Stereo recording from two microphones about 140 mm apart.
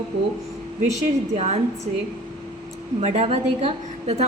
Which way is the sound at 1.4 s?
50° right (ahead or behind).